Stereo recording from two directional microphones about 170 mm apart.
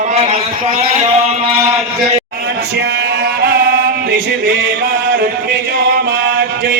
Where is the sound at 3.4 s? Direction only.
65° right (ahead or behind).